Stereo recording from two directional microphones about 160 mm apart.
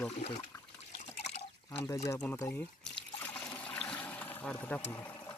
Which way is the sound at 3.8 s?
5° left (ahead or behind).